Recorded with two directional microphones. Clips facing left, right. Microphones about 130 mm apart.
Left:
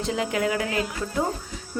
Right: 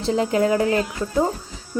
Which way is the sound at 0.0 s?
35° right (ahead or behind).